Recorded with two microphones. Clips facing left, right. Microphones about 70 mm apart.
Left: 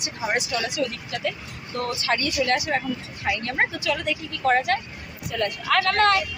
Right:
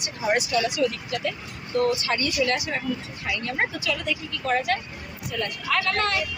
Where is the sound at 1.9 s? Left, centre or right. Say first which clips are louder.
Right 1 dB; left.